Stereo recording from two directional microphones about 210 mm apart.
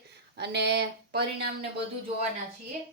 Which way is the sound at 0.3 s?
55° right (ahead or behind).